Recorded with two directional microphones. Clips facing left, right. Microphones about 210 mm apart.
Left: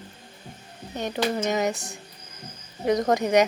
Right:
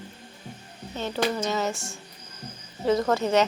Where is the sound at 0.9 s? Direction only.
15° left (ahead or behind).